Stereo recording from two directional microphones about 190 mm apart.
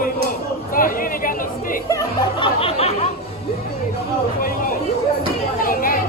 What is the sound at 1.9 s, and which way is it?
Music, 20° left (ahead or behind).